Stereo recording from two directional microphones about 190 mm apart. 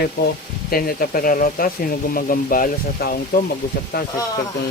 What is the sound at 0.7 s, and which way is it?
Speech, 50° left (ahead or behind).